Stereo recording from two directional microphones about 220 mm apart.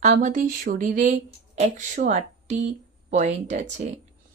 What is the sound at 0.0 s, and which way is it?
Speech, 35° right (ahead or behind).